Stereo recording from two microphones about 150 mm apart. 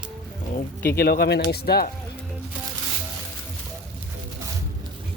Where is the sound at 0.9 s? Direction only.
90° left.